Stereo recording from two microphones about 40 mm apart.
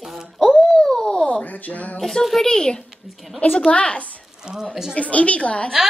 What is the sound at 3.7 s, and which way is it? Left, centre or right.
Speech, left.